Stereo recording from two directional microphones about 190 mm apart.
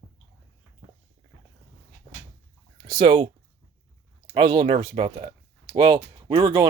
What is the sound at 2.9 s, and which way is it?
Speech, 25° right (ahead or behind).